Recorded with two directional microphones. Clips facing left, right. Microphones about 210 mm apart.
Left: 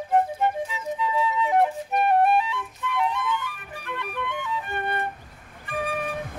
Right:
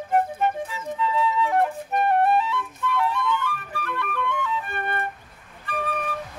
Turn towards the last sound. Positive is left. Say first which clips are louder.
# even
turn(degrees=15)  # may be behind; listen again after turning